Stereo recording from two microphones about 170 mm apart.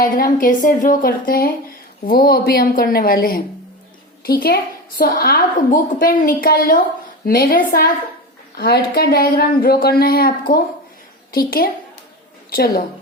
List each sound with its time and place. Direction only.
0.0 s a woman's voice: 55° left (ahead or behind)
8.5 s a woman's voice: 70° left (ahead or behind)